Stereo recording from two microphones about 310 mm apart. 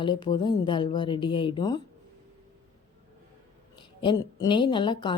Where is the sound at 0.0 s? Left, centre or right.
Centre.